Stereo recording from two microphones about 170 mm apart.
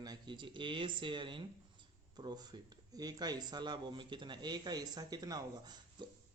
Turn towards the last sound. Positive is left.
turn(degrees=-25)  # may be behind; listen again after turning